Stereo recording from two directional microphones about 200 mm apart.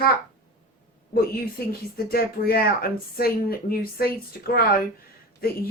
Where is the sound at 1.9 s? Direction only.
50° left (ahead or behind).